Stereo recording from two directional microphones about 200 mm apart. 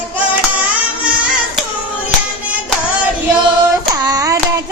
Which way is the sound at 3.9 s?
20° right (ahead or behind).